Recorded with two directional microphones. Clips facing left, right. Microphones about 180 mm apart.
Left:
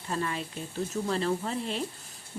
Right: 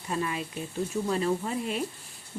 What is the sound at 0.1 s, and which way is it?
Speech, 15° right (ahead or behind).